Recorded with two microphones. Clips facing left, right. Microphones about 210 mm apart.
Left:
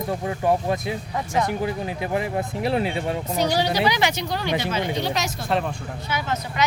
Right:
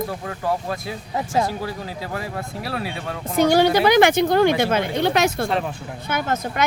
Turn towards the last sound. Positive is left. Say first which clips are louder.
# right 3 dB
turn(degrees=-50)  # may be behind; listen again after turning